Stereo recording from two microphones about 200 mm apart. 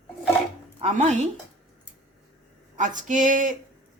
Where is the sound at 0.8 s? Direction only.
35° right (ahead or behind).